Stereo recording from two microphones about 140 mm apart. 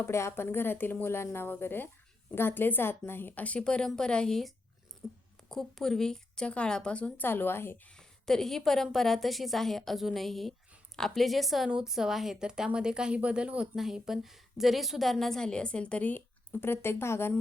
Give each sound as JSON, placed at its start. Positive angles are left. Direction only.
{"t": 0.0, "sound": "a woman's voice", "side_deg": 20}
{"t": 7.9, "sound": "a woman's voice", "side_deg": 5}